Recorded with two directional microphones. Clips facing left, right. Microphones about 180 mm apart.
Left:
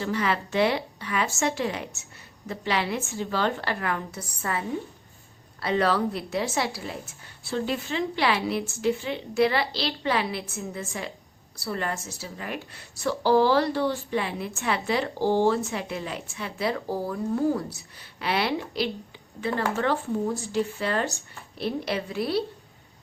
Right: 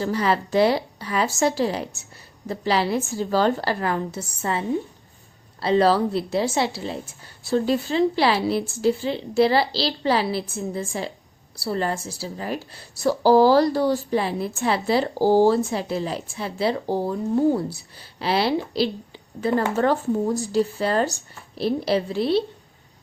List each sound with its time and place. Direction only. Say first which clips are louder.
0.0 s a woman's voice: right 4 dB; 35° right (ahead or behind)
7.0 s a woman's voice: right 3 dB; 40° right (ahead or behind)